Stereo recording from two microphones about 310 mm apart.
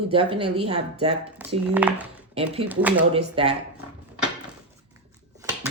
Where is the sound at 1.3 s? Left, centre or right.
Centre.